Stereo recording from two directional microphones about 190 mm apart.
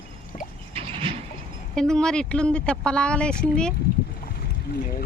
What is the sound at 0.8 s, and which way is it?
Vehicle, 30° right (ahead or behind).